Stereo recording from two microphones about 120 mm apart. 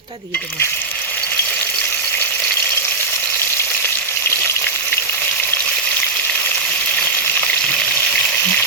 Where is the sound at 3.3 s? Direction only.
15° left (ahead or behind).